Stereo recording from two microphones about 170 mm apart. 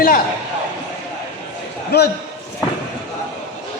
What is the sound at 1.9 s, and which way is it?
Speech, 75° left (ahead or behind).